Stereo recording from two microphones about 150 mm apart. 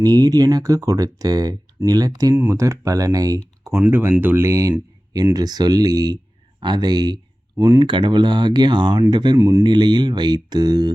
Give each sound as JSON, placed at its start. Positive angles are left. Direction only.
{"t": 0.0, "sound": "speech", "side_deg": -25}
{"t": 9.4, "sound": "speech", "side_deg": -20}
{"t": 9.6, "sound": "speech", "side_deg": -30}